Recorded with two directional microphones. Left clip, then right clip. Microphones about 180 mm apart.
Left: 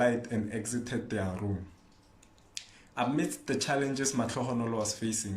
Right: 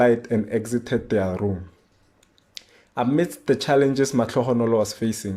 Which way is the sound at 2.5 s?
50° right (ahead or behind).